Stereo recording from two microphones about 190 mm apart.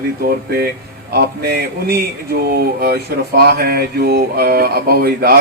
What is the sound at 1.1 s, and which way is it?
Speech, 55° right (ahead or behind).